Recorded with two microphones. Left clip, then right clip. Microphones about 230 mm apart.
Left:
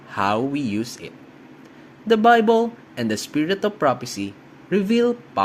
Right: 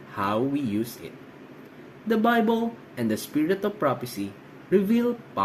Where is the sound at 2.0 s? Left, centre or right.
Left.